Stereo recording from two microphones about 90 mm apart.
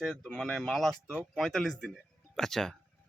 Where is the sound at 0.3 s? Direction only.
5° left (ahead or behind).